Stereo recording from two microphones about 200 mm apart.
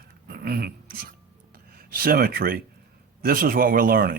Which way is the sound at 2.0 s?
50° right (ahead or behind).